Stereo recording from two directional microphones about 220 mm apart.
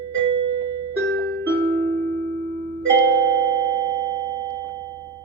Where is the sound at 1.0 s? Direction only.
50° right (ahead or behind).